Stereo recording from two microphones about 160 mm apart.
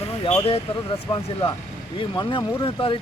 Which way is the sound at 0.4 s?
35° left (ahead or behind).